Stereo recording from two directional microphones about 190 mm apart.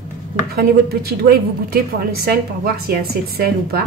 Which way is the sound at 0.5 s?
55° right (ahead or behind).